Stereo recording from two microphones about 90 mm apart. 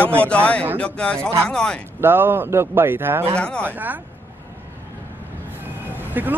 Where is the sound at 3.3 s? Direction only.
10° left (ahead or behind).